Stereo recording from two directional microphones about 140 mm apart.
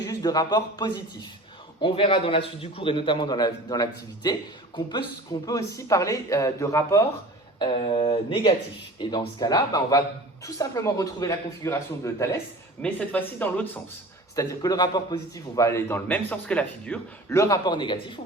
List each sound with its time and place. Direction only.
0.1 s a man's voice: 25° left (ahead or behind)
7.8 s a man's voice: 40° left (ahead or behind); by 13.7 s 10° left (ahead or behind)
14.3 s a man's voice: 30° left (ahead or behind); by 17.0 s 10° left (ahead or behind)
17.2 s a man's voice: 20° left (ahead or behind)